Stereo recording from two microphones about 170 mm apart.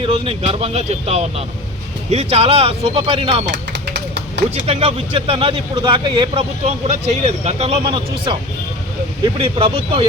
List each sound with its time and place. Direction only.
0.0 s speech: 35° right (ahead or behind)
3.4 s a sound: 90° right
4.6 s speech: 35° right (ahead or behind)
9.4 s speech: 35° right (ahead or behind)